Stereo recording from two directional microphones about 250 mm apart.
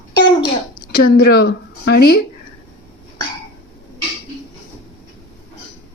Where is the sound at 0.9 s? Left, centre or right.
Left.